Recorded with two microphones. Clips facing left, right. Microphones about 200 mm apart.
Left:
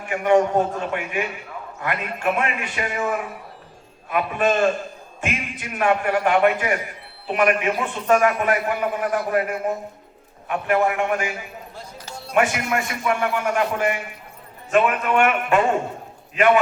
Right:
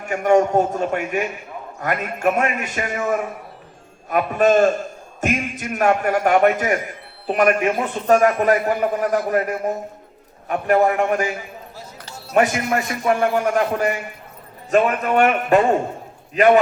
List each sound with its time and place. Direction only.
0.0 s a man's voice: 45° right (ahead or behind)
12.3 s a man's voice: 40° right (ahead or behind)